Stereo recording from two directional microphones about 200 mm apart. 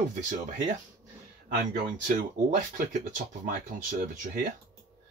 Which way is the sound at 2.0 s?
40° right (ahead or behind).